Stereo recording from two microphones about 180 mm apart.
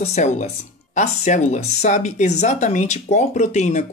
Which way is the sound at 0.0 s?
40° left (ahead or behind).